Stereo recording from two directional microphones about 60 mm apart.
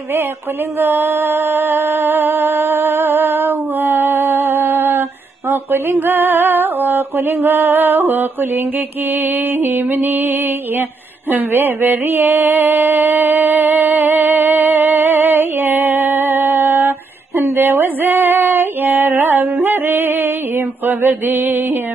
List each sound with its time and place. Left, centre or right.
0.7 s music: right
5.5 s a sound: right
5.9 s music: right
11.2 s mantra: right
17.6 s female singing: right